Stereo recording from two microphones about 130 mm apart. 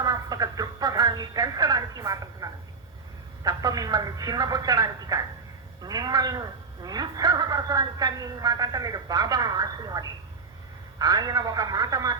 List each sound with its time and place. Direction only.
0.0 s radio: 30° right (ahead or behind)
3.4 s speech: 30° right (ahead or behind)